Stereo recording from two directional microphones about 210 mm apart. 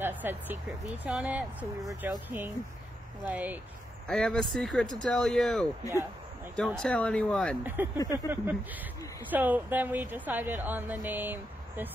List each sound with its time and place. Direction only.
0.0 s a woman's voice: 10° right (ahead or behind)
4.1 s speech: centre (ahead or behind)
7.6 s a woman's voice: 10° right (ahead or behind)
8.0 s speech: 15° left (ahead or behind)
9.3 s a woman's voice: 10° right (ahead or behind)